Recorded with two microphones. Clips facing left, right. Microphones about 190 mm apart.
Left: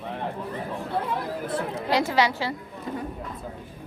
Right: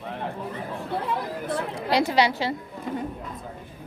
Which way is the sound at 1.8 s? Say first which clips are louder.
Right 1 dB; 15° right (ahead or behind).